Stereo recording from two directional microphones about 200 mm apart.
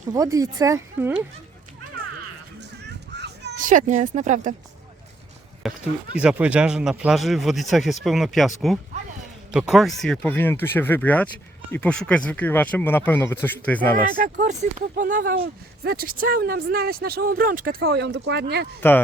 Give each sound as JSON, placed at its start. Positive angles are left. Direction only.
{"t": 0.1, "sound": "speech", "side_deg": -15}
{"t": 3.1, "sound": "children playing", "side_deg": -60}
{"t": 3.6, "sound": "speech", "side_deg": -40}
{"t": 5.6, "sound": "speech", "side_deg": 0}
{"t": 14.0, "sound": "speech", "side_deg": -45}